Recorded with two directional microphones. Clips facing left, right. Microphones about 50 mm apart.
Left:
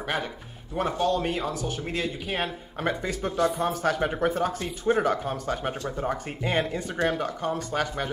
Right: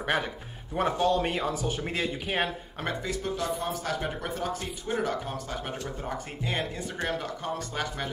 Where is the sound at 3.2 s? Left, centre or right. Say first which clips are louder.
Left 7 dB; left.